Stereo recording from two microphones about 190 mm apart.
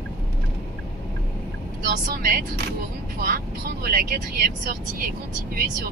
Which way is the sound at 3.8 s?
50° right (ahead or behind).